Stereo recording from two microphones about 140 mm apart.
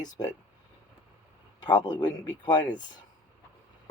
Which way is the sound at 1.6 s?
30° left (ahead or behind).